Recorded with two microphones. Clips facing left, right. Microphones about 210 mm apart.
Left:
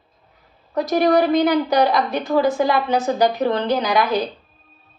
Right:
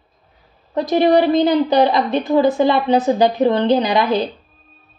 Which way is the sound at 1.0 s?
25° right (ahead or behind).